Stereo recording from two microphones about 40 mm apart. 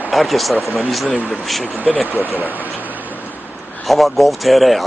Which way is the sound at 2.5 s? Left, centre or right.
Right.